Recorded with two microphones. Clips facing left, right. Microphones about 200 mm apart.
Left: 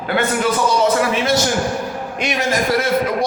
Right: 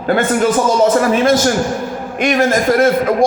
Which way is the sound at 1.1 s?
50° right (ahead or behind).